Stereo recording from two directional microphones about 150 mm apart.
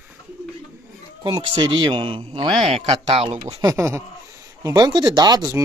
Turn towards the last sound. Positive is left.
turn(degrees=-25)  # may be behind; listen again after turning